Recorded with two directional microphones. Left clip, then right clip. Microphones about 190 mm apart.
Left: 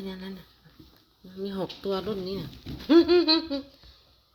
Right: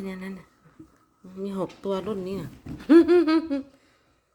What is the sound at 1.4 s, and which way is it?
Speech, 35° right (ahead or behind).